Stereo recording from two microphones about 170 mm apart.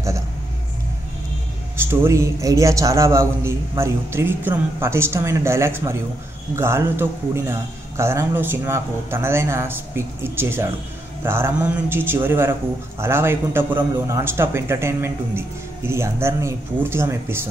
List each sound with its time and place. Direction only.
1.8 s speech: 15° right (ahead or behind)